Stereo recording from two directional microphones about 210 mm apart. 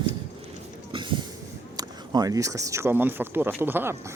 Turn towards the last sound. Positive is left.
turn(degrees=-10)  # may be behind; listen again after turning